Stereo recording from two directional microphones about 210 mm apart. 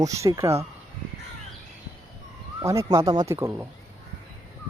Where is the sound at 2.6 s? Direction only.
15° right (ahead or behind).